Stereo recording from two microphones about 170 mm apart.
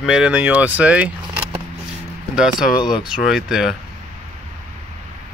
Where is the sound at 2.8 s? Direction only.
25° left (ahead or behind).